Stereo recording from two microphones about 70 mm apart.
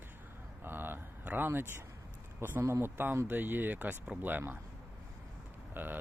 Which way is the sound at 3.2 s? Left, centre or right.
Right.